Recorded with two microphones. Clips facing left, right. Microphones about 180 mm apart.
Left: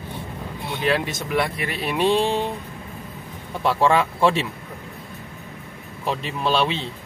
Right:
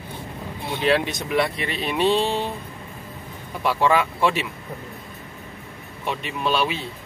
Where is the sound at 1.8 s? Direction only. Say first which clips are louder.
Left 1 dB; 10° left (ahead or behind).